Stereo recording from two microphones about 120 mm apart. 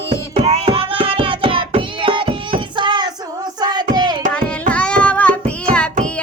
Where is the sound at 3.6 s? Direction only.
35° right (ahead or behind).